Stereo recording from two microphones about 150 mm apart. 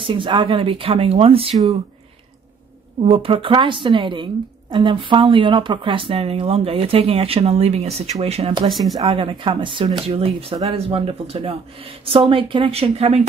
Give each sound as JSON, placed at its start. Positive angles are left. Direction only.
{"t": 0.0, "sound": "speech", "side_deg": -35}
{"t": 3.0, "sound": "speech", "side_deg": -40}